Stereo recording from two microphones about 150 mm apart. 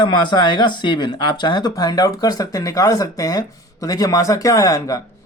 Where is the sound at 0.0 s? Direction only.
30° left (ahead or behind).